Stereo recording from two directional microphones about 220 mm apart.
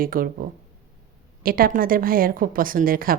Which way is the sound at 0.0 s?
40° right (ahead or behind).